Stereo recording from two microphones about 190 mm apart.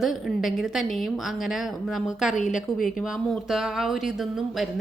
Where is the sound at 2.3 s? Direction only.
40° left (ahead or behind).